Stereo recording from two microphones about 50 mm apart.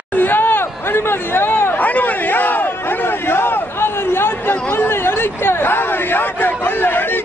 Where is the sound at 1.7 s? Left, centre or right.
Left.